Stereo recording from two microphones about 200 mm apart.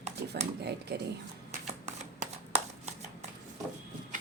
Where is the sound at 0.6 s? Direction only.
55° right (ahead or behind).